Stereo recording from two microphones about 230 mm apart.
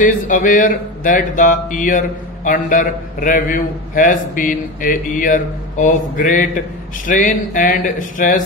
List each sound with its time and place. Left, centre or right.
0.0 s speech: left